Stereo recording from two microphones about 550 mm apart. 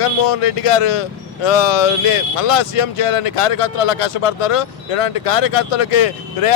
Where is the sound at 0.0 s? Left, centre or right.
Left.